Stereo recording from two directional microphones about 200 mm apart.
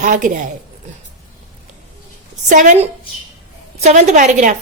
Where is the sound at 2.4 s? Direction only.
40° right (ahead or behind).